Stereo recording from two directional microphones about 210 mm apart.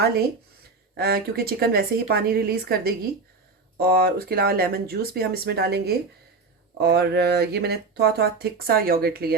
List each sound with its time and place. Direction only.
0.9 s speech: 45° right (ahead or behind)